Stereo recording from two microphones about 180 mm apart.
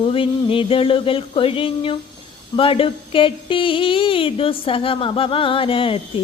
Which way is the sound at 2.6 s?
30° left (ahead or behind).